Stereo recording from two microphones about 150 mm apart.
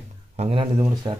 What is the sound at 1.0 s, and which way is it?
Speech, 30° right (ahead or behind).